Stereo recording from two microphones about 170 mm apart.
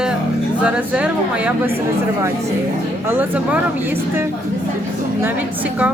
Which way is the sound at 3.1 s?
10° right (ahead or behind).